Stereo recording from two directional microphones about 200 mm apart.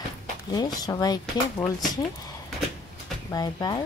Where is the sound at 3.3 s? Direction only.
20° left (ahead or behind).